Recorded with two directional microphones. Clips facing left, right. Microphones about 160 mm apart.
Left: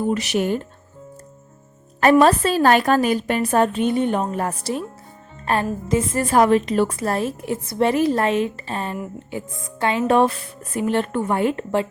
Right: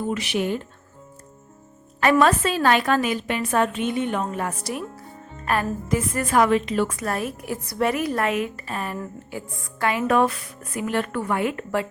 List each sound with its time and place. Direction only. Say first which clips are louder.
0.1 s a woman's voice: left 4 dB; 40° left (ahead or behind)
2.0 s a woman's voice: left 4 dB; 35° left (ahead or behind)